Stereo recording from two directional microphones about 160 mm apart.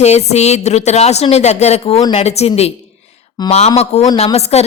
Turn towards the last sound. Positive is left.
turn(degrees=40)  # may be behind; listen again after turning